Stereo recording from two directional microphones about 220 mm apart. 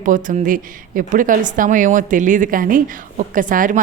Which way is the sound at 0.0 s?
35° right (ahead or behind).